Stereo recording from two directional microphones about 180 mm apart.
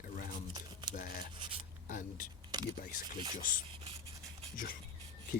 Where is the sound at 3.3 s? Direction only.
50° left (ahead or behind).